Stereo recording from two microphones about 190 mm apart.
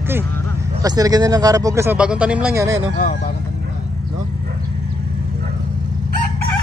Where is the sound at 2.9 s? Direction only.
45° left (ahead or behind).